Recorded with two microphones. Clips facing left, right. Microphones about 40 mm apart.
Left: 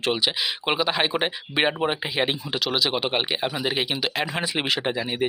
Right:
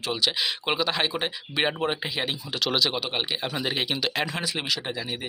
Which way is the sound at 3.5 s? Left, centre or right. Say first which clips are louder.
Left 2 dB; centre.